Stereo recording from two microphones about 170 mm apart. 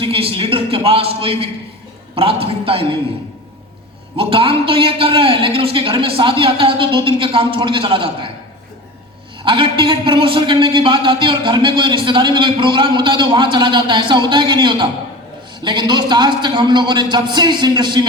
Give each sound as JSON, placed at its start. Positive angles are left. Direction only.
{"t": 0.0, "sound": "a man's voice", "side_deg": -35}
{"t": 4.2, "sound": "a man's voice", "side_deg": -30}
{"t": 9.4, "sound": "a man's voice", "side_deg": -30}